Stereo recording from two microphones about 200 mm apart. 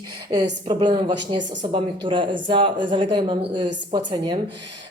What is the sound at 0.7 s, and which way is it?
Speech, 25° right (ahead or behind).